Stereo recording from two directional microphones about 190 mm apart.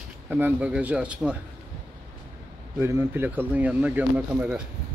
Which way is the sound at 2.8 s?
10° right (ahead or behind).